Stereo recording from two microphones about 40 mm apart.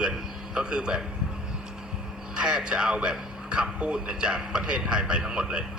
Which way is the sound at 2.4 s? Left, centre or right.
Right.